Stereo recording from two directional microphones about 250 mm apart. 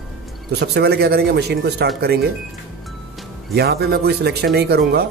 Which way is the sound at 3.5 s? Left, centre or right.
Right.